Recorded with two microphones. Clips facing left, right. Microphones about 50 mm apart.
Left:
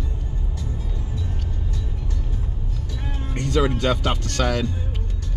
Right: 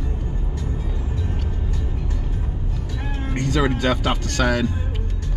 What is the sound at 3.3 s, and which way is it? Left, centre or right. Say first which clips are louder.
Speech: even; centre.